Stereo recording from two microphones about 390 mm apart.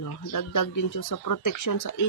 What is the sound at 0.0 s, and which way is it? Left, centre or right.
Speech, left.